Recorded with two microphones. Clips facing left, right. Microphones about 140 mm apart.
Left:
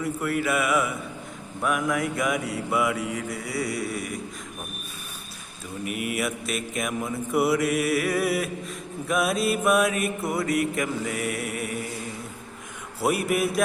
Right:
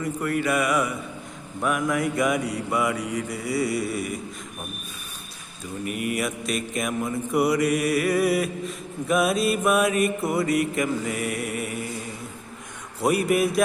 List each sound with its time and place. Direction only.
0.0 s mantra: 5° left (ahead or behind)
5.8 s mantra: 5° left (ahead or behind)
13.0 s mantra: centre (ahead or behind)